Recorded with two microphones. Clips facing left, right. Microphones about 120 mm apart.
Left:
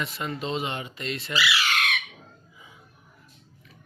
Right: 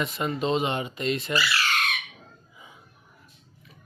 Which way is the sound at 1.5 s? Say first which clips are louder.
Left 1 dB; 5° left (ahead or behind).